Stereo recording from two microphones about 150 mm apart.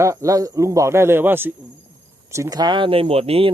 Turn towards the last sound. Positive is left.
turn(degrees=-40)  # may be behind; listen again after turning